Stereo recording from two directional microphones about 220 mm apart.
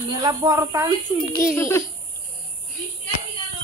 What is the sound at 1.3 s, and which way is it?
Speech, 10° left (ahead or behind).